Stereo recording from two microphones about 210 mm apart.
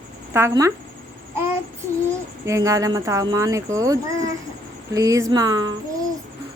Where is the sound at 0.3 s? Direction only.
15° right (ahead or behind).